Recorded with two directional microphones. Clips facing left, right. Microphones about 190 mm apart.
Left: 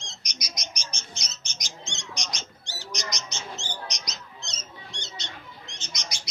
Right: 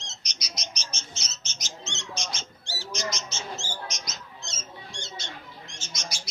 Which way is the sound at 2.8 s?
15° left (ahead or behind).